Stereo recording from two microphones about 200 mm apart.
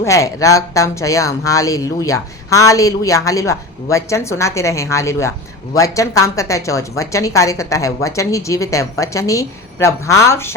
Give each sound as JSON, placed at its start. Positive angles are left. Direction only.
{"t": 0.0, "sound": "speech", "side_deg": 15}